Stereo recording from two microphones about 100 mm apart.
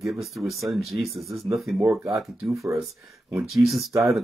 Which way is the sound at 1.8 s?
20° right (ahead or behind).